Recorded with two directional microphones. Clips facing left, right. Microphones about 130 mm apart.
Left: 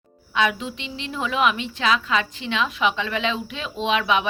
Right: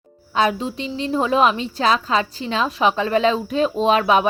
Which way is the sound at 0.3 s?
35° right (ahead or behind).